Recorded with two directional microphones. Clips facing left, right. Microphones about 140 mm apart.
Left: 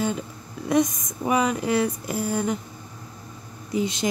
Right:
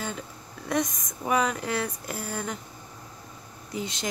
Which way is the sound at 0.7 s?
15° left (ahead or behind).